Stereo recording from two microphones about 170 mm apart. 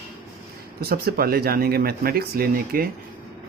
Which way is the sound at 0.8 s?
65° right (ahead or behind).